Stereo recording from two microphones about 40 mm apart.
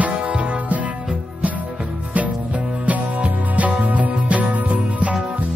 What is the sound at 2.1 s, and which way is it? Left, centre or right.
Music, right.